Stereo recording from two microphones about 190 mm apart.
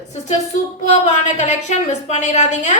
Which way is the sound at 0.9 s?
40° left (ahead or behind).